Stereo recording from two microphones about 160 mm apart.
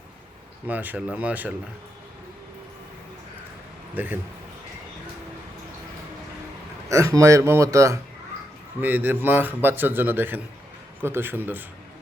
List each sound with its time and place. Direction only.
0.7 s a man's voice: 10° right (ahead or behind)
3.9 s a man's voice: 10° right (ahead or behind)
6.8 s a man's voice: 20° right (ahead or behind)